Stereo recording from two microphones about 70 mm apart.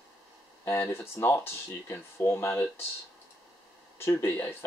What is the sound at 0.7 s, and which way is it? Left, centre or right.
Speech, left.